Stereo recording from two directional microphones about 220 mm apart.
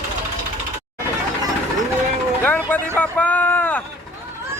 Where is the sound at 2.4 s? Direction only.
5° left (ahead or behind).